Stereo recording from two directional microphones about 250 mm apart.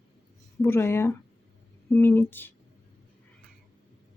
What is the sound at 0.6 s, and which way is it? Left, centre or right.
Speech, centre.